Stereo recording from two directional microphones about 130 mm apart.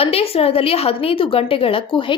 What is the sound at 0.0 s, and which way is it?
A woman's voice, 50° left (ahead or behind).